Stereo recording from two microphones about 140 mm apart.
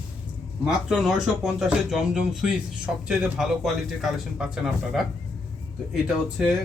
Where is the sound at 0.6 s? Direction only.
5° right (ahead or behind).